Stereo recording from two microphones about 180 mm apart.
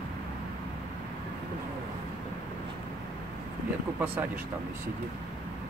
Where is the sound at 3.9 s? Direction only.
10° right (ahead or behind).